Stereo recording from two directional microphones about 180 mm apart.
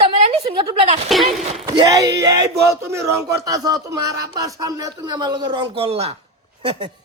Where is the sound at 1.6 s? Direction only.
20° right (ahead or behind).